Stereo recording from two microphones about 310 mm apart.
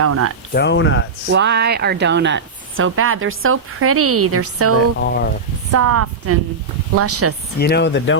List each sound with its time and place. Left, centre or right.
0.0 s speech: right
0.5 s speech: left
1.3 s a woman's voice: right
4.9 s speech: left
5.7 s speech: right
7.6 s speech: left